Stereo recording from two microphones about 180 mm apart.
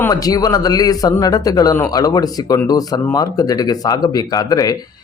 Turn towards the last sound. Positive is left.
turn(degrees=20)  # may be behind; listen again after turning